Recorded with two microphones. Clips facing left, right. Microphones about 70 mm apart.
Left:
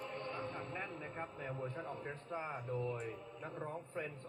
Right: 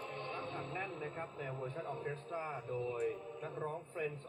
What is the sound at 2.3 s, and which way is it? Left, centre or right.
A man's voice, left.